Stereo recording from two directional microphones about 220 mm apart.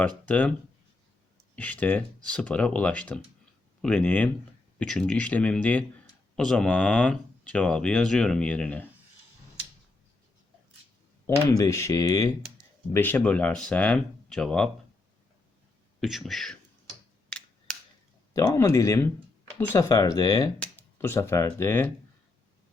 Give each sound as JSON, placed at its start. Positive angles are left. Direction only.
{"t": 0.0, "sound": "speech", "side_deg": 5}
{"t": 1.5, "sound": "speech", "side_deg": 5}
{"t": 11.3, "sound": "speech", "side_deg": 15}
{"t": 16.0, "sound": "speech", "side_deg": 0}
{"t": 17.2, "sound": "finger snapping", "side_deg": 5}
{"t": 18.3, "sound": "speech", "side_deg": 15}